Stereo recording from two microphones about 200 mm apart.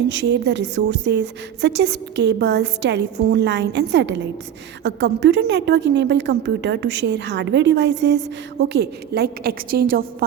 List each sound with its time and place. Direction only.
0.1 s a woman's voice: 65° right (ahead or behind); by 10.2 s 50° right (ahead or behind)